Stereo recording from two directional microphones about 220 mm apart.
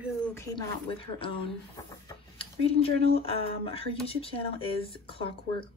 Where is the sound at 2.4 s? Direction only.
25° left (ahead or behind).